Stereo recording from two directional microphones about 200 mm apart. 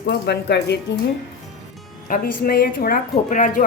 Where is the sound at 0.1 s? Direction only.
55° left (ahead or behind).